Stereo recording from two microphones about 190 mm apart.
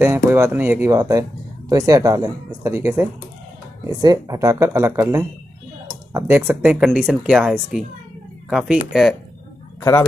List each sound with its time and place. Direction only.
0.0 s speech: 15° right (ahead or behind)
9.8 s speech: 15° left (ahead or behind)